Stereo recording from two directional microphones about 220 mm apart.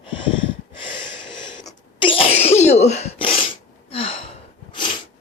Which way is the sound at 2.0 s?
25° left (ahead or behind).